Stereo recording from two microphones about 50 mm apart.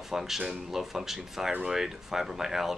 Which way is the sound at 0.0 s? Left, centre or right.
Centre.